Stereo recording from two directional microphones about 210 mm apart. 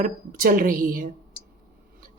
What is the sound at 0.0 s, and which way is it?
A woman's voice, 40° right (ahead or behind).